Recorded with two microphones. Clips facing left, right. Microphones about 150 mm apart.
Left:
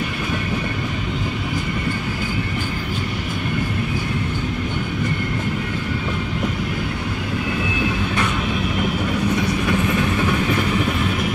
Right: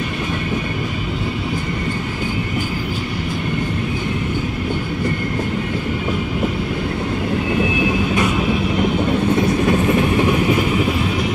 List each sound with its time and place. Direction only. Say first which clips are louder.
9.7 s train: right 4 dB; 25° right (ahead or behind)